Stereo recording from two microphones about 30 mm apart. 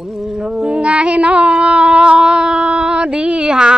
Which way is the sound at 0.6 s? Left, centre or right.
Right.